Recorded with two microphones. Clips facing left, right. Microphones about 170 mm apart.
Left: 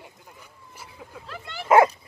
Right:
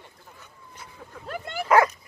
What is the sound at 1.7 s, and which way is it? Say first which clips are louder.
Dog: left 3 dB; 25° left (ahead or behind).